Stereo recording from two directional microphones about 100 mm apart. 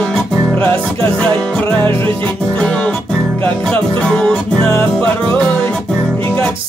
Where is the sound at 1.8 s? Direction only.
25° left (ahead or behind).